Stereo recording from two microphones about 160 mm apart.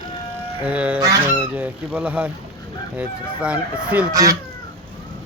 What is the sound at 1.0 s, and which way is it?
Speech, 20° right (ahead or behind).